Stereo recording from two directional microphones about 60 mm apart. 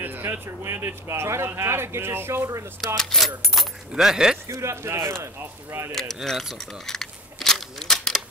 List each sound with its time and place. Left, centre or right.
0.0 s speech: right
3.0 s speech: centre
3.9 s speech: centre
4.5 s speech: right
5.9 s speech: centre
6.6 s a sound: centre